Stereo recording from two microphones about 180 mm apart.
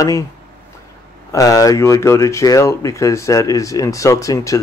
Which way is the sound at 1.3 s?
20° left (ahead or behind).